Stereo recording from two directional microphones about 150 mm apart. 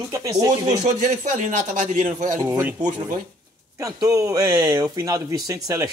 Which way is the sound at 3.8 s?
20° right (ahead or behind).